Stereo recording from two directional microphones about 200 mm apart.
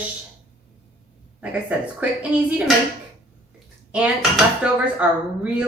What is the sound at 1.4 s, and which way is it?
A woman's voice, 5° right (ahead or behind).